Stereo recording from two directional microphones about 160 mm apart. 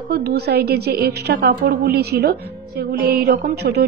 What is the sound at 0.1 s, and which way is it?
A woman's voice, 80° right.